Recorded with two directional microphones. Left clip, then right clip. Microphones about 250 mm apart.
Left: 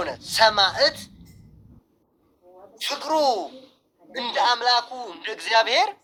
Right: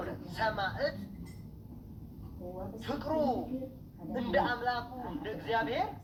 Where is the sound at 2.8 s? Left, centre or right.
Left.